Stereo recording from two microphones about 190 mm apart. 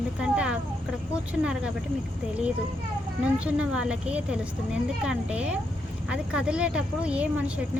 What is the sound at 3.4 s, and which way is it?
A woman's voice, 5° right (ahead or behind).